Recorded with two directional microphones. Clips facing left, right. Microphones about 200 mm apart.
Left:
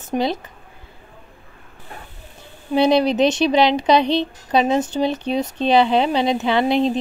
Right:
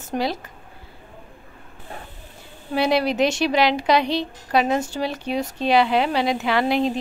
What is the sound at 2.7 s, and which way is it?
Speech, 20° left (ahead or behind).